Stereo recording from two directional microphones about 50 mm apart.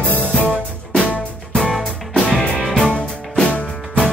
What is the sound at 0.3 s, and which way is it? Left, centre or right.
Music, left.